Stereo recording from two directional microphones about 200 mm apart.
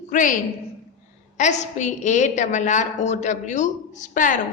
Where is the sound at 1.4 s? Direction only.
35° left (ahead or behind).